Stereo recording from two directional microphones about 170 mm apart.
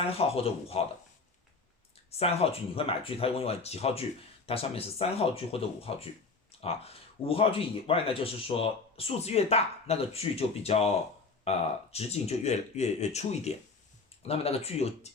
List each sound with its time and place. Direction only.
0.1 s speech: 35° left (ahead or behind)
2.0 s speech: 35° left (ahead or behind)